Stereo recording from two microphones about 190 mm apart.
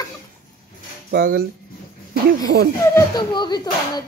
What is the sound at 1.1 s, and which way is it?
Speech, 50° right (ahead or behind).